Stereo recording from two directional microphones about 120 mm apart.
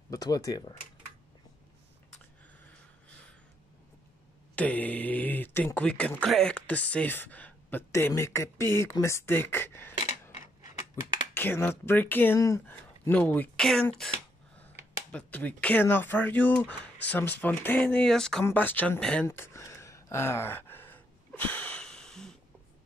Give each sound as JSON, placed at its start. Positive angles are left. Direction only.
{"t": 0.1, "sound": "speech", "side_deg": 30}
{"t": 4.6, "sound": "mantra", "side_deg": 10}
{"t": 5.8, "sound": "speech", "side_deg": 10}
{"t": 11.0, "sound": "speech", "side_deg": 25}
{"t": 12.4, "sound": "speech", "side_deg": 25}
{"t": 12.6, "sound": "speech", "side_deg": 15}
{"t": 13.6, "sound": "speech", "side_deg": 5}
{"t": 15.0, "sound": "speech", "side_deg": 10}
{"t": 18.4, "sound": "speech", "side_deg": 15}
{"t": 19.2, "sound": "a sound", "side_deg": 20}